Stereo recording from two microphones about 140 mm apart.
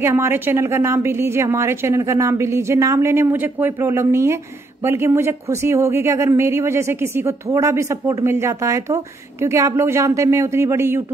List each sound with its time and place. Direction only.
0.0 s speech: 20° right (ahead or behind)